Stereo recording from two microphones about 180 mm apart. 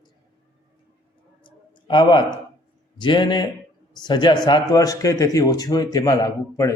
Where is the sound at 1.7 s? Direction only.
25° left (ahead or behind).